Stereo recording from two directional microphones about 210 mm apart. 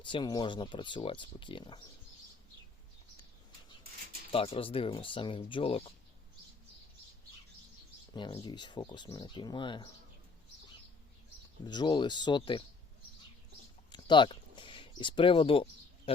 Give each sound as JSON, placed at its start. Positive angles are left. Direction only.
{"t": 0.0, "sound": "speech", "side_deg": 20}
{"t": 4.3, "sound": "speech", "side_deg": 25}
{"t": 8.1, "sound": "speech", "side_deg": 20}
{"t": 11.6, "sound": "speech", "side_deg": 20}
{"t": 13.9, "sound": "a sound", "side_deg": 20}